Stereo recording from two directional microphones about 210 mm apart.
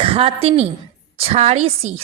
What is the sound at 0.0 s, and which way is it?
A woman's voice, 25° right (ahead or behind).